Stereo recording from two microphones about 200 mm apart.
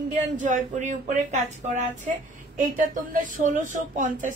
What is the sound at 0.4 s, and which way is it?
Speech, 40° right (ahead or behind).